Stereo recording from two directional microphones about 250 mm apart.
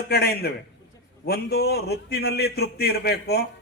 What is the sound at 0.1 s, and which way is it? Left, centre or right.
Speech, left.